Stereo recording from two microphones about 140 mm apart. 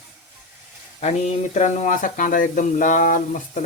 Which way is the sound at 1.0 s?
55° left (ahead or behind).